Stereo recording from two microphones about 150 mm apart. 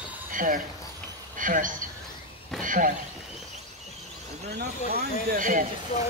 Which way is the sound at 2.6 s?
60° right (ahead or behind).